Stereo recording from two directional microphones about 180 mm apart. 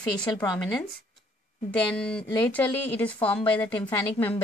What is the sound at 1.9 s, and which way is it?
A woman's voice, 5° left (ahead or behind).